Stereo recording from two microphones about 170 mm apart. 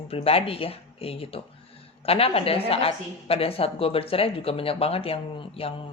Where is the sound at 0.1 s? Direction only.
35° left (ahead or behind).